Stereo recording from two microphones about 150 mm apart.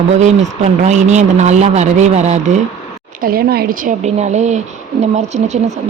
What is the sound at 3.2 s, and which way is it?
Speech, 90° right.